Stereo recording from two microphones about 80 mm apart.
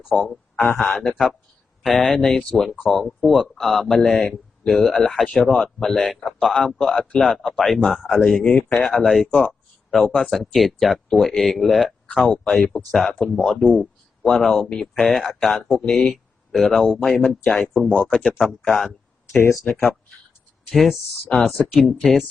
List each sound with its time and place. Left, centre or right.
0.1 s a man's voice: centre
0.5 s speech: left
0.8 s a man's voice: centre
19.3 s speech: left
20.7 s a man's voice: centre